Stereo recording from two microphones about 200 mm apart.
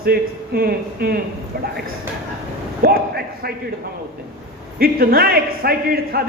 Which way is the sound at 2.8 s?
50° right (ahead or behind).